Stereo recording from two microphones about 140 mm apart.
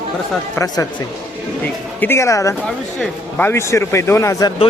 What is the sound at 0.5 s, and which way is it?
Speech, 25° left (ahead or behind).